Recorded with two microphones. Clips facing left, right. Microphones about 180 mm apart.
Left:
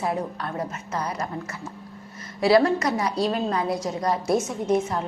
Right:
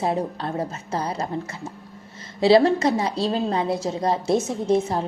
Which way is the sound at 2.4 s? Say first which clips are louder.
Right 3 dB; 25° right (ahead or behind).